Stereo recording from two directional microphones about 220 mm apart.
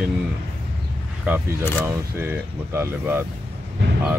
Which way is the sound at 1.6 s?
10° left (ahead or behind).